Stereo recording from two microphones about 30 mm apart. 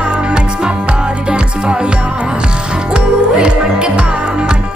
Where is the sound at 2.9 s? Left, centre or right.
Right.